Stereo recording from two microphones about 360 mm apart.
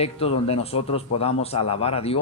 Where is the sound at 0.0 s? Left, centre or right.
Centre.